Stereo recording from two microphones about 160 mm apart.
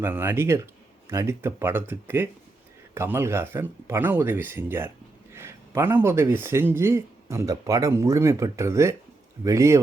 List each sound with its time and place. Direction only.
0.0 s a man's voice: 15° right (ahead or behind)